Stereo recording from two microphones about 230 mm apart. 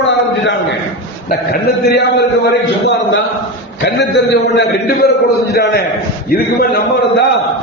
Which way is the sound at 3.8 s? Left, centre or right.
Left.